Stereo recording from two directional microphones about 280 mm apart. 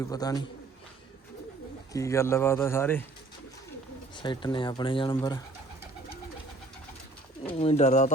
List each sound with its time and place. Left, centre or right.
0.0 s speech: centre
1.9 s speech: centre
4.1 s speech: centre
7.6 s speech: left